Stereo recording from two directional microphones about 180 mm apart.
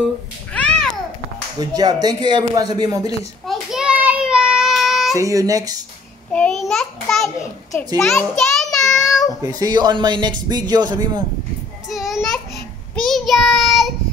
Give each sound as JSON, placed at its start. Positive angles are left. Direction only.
{"t": 0.5, "sound": "babbling", "side_deg": 5}
{"t": 1.6, "sound": "a man's voice", "side_deg": -20}
{"t": 3.4, "sound": "child singing", "side_deg": 0}
{"t": 5.1, "sound": "a man's voice", "side_deg": -20}
{"t": 6.3, "sound": "a sound", "side_deg": 5}
{"t": 9.4, "sound": "a man's voice", "side_deg": -20}
{"t": 11.9, "sound": "child singing", "side_deg": 0}